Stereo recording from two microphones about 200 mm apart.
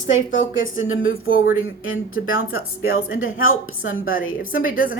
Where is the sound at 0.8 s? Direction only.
80° left.